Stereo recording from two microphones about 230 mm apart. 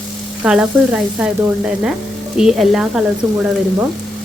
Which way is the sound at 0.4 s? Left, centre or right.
Centre.